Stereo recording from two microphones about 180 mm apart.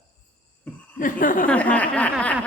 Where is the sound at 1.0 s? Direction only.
50° left (ahead or behind).